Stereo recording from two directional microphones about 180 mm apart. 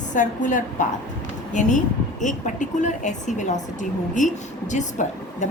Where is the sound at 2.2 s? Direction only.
45° left (ahead or behind).